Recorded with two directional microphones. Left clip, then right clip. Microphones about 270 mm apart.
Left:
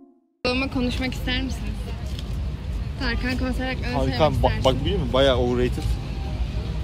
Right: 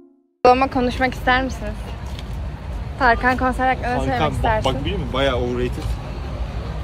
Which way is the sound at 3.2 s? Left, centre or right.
Right.